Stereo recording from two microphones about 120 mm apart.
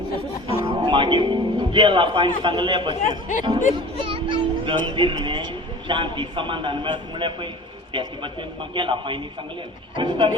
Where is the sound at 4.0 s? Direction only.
45° right (ahead or behind).